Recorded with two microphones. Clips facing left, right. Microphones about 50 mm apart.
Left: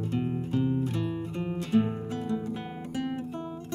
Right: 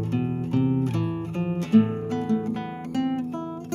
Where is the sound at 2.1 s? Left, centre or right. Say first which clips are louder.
Right 6 dB; right.